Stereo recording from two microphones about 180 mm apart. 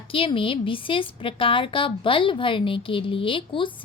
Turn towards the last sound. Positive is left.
turn(degrees=30)  # may be behind; listen again after turning